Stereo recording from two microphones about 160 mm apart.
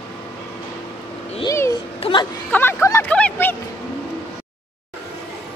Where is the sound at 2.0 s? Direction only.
35° left (ahead or behind).